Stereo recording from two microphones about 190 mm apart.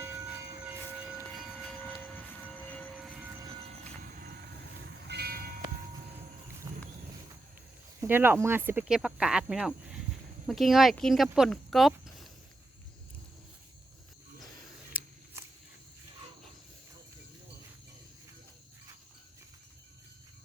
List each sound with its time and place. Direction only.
0.0 s train: 10° right (ahead or behind)
2.1 s train: 10° left (ahead or behind)
3.1 s train: 10° right (ahead or behind)
4.1 s vehicle: 50° right (ahead or behind)
5.0 s train: 60° right (ahead or behind)
8.0 s speech: 10° right (ahead or behind)
14.9 s scissors: 10° right (ahead or behind)